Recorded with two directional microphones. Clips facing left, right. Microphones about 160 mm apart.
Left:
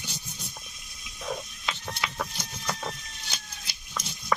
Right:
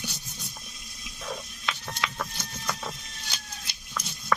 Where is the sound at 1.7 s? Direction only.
10° left (ahead or behind).